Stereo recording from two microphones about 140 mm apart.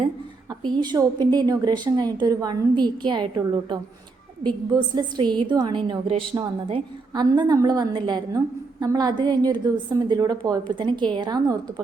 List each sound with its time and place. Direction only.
0.6 s a woman's voice: 30° right (ahead or behind)
7.1 s a woman's voice: 30° right (ahead or behind)